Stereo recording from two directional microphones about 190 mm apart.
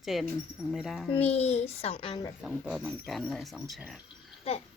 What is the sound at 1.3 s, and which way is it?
A child's voice, 35° left (ahead or behind).